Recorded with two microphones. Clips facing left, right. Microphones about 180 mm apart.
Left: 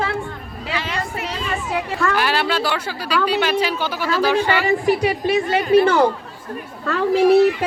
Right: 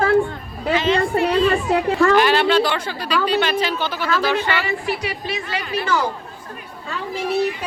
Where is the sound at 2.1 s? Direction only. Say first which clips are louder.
Right 5 dB; 5° left (ahead or behind).